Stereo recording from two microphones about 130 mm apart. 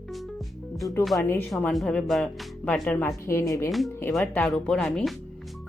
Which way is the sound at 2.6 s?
10° left (ahead or behind).